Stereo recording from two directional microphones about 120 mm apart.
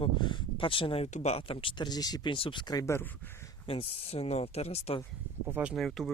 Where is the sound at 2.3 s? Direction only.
45° left (ahead or behind).